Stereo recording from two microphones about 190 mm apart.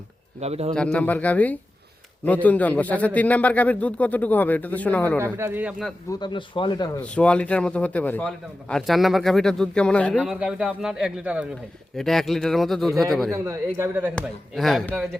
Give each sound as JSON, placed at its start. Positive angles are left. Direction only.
{"t": 0.3, "sound": "speech", "side_deg": -35}
{"t": 0.7, "sound": "a man's voice", "side_deg": 5}
{"t": 5.2, "sound": "speech", "side_deg": -10}
{"t": 6.1, "sound": "speech", "side_deg": 25}
{"t": 7.0, "sound": "a man's voice", "side_deg": 5}
{"t": 13.3, "sound": "speech", "side_deg": -15}
{"t": 14.2, "sound": "a man's voice", "side_deg": 0}